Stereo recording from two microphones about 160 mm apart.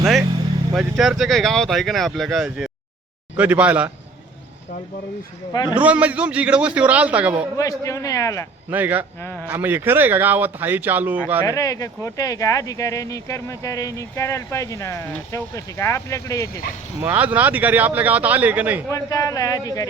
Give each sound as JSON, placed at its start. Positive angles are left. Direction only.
{"t": 0.0, "sound": "vehicle", "side_deg": 0}
{"t": 0.7, "sound": "speech", "side_deg": 0}
{"t": 5.6, "sound": "speech", "side_deg": -10}
{"t": 7.5, "sound": "speech", "side_deg": 20}
{"t": 8.7, "sound": "speech", "side_deg": -10}
{"t": 9.2, "sound": "a man's voice", "side_deg": 10}
{"t": 9.5, "sound": "speech", "side_deg": -15}
{"t": 11.4, "sound": "speech", "side_deg": 20}
{"t": 17.0, "sound": "speech", "side_deg": -10}
{"t": 18.9, "sound": "speech", "side_deg": 20}